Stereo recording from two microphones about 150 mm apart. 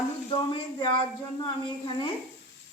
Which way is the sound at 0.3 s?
30° left (ahead or behind).